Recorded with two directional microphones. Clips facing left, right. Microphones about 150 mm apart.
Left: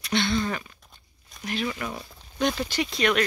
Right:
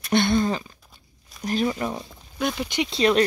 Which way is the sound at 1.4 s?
40° right (ahead or behind).